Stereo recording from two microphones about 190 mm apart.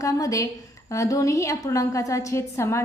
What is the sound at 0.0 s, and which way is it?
A woman's voice, 20° left (ahead or behind).